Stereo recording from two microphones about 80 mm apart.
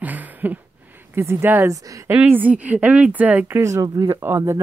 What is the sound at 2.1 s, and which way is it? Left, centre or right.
Speech, right.